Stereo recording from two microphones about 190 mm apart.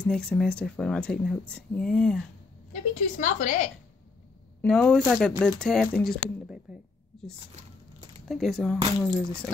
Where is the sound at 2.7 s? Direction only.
40° left (ahead or behind).